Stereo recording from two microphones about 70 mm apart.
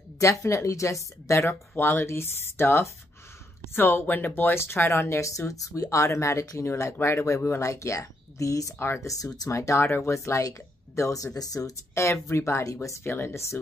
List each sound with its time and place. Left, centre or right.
0.2 s speech: left
1.5 s speech: left
11.9 s speech: left